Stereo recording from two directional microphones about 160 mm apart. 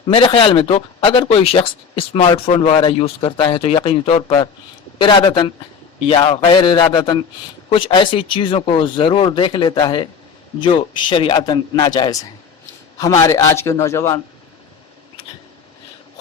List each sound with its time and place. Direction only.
0.1 s a man's voice: 30° left (ahead or behind)
13.2 s speech: 20° left (ahead or behind)